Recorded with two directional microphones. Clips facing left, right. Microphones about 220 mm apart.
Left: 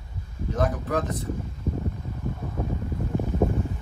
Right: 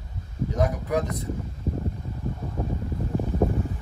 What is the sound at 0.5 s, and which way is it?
Speech, 10° right (ahead or behind).